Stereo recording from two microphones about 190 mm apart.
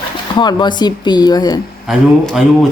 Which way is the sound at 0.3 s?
25° left (ahead or behind).